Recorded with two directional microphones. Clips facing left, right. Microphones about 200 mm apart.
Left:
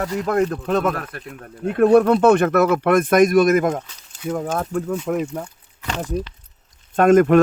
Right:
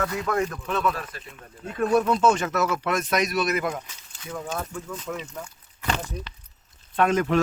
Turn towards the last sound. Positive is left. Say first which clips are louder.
# left 9 dB
turn(degrees=50)  # may be behind; listen again after turning